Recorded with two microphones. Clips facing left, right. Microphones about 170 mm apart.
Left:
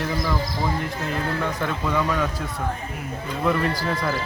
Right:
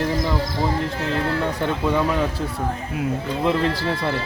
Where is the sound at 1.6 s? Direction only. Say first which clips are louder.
Right 4 dB; 30° right (ahead or behind).